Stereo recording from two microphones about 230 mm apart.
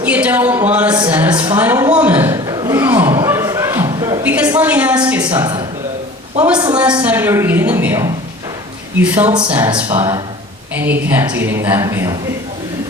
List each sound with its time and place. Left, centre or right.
0.0 s speech: centre
1.5 s a sound: centre
5.2 s speech: centre
9.3 s speech: centre